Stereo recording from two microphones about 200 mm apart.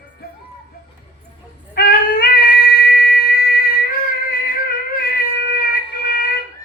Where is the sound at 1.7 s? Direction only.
50° left (ahead or behind).